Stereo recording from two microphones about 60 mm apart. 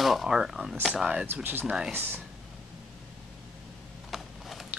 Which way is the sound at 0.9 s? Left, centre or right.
Centre.